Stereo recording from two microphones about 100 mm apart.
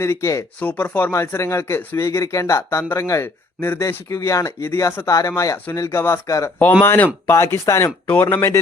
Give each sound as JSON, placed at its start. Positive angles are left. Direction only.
{"t": 0.0, "sound": "speech", "side_deg": 30}
{"t": 0.6, "sound": "speech", "side_deg": 15}
{"t": 8.0, "sound": "speech", "side_deg": 20}